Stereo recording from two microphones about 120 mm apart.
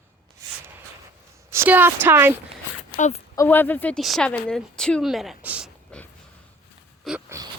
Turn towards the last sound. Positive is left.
turn(degrees=0)  # may be behind; listen again after turning